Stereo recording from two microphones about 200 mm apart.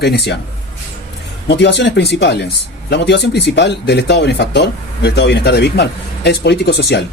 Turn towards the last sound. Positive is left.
turn(degrees=55)  # may be behind; listen again after turning